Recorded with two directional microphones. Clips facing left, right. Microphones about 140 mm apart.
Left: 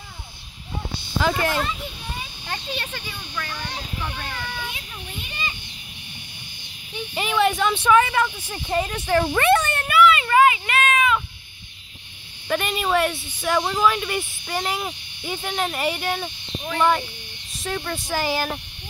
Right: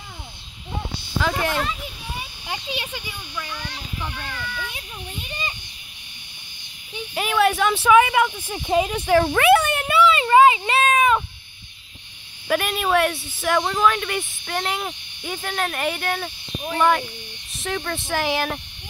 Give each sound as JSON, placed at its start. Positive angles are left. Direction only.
{"t": 1.2, "sound": "speech", "side_deg": 0}
{"t": 2.4, "sound": "speech", "side_deg": -10}
{"t": 7.2, "sound": "speech", "side_deg": 0}
{"t": 9.0, "sound": "speech", "side_deg": 0}
{"t": 9.8, "sound": "a sound", "side_deg": -30}
{"t": 12.4, "sound": "speech", "side_deg": -5}
{"t": 17.5, "sound": "speech", "side_deg": 0}